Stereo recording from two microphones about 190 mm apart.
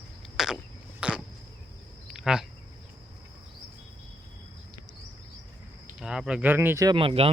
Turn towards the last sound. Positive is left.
turn(degrees=-30)  # may be behind; listen again after turning